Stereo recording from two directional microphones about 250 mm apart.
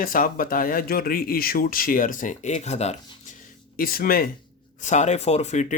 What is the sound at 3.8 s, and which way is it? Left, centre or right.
Speech, left.